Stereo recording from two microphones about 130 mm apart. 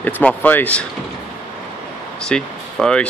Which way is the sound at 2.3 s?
5° left (ahead or behind).